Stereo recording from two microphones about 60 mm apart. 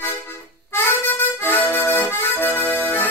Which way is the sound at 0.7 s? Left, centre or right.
Left.